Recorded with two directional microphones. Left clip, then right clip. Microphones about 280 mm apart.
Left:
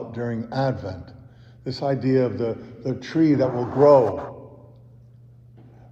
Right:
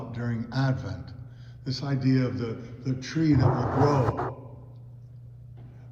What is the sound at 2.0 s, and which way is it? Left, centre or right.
Speech, centre.